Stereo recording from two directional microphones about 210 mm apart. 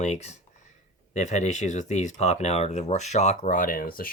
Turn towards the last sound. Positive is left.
turn(degrees=45)  # may be behind; listen again after turning